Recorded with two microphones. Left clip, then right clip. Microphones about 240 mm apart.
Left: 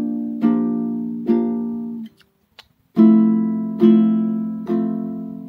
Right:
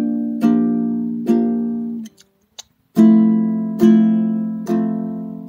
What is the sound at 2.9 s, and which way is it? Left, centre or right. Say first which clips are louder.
Music: right 1 dB; right.